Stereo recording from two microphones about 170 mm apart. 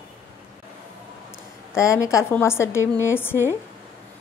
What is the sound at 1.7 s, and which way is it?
A woman's voice, 20° left (ahead or behind).